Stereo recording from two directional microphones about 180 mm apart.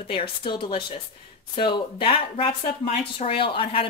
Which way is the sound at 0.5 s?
30° left (ahead or behind).